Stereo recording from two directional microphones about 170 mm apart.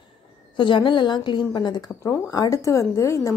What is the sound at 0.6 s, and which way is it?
Speech, 30° left (ahead or behind).